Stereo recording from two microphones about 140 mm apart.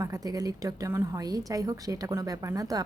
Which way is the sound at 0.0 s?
25° right (ahead or behind).